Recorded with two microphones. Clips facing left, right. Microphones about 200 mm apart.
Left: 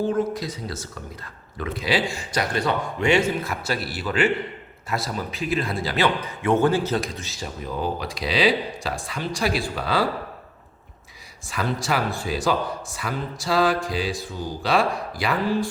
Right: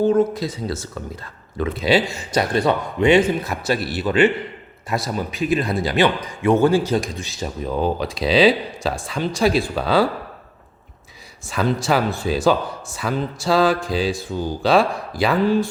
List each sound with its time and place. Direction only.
0.3 s a man's voice: 25° right (ahead or behind)
11.4 s a man's voice: 25° right (ahead or behind)